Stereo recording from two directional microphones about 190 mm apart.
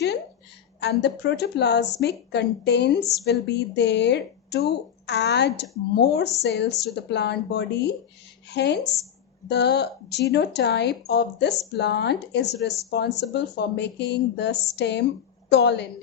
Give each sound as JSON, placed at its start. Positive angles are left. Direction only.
{"t": 0.8, "sound": "a woman's voice", "side_deg": 65}